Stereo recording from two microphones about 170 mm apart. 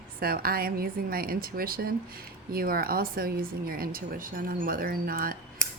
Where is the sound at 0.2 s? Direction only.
60° right (ahead or behind).